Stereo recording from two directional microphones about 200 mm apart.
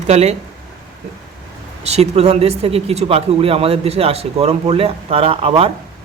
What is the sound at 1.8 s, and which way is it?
Speech, 30° right (ahead or behind).